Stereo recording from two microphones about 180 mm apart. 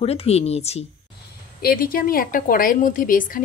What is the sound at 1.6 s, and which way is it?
A woman's voice, 55° left (ahead or behind).